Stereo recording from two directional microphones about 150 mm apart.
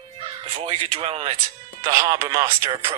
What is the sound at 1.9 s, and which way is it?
Speech, 25° right (ahead or behind).